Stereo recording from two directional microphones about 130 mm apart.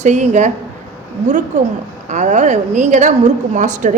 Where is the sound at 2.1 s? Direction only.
65° right (ahead or behind).